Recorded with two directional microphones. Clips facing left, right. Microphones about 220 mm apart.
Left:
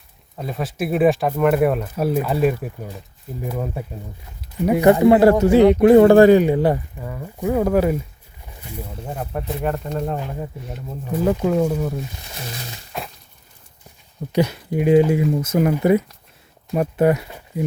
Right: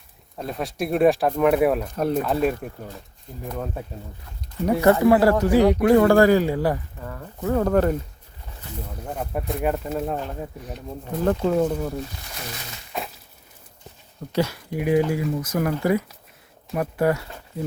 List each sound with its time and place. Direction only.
0.3 s speech: centre (ahead or behind); by 6.8 s 25° left (ahead or behind)
7.0 s speech: 10° left (ahead or behind)
9.0 s speech: centre (ahead or behind)
11.1 s speech: 5° left (ahead or behind)
12.9 s a sound: centre (ahead or behind)
14.3 s speech: 20° left (ahead or behind)